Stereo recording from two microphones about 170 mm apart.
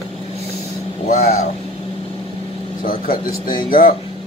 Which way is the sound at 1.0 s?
60° left (ahead or behind).